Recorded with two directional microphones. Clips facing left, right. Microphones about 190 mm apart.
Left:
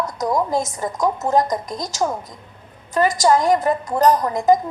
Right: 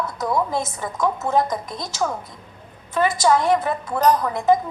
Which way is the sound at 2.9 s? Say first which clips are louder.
Left 2 dB; 40° left (ahead or behind).